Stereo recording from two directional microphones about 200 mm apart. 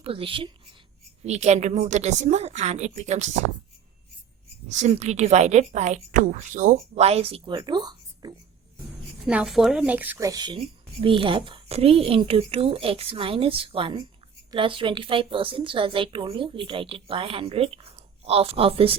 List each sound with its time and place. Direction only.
0.0 s a woman's voice: 25° right (ahead or behind)
4.8 s a woman's voice: 35° right (ahead or behind)
9.2 s a woman's voice: 5° right (ahead or behind); by 18.9 s 30° right (ahead or behind)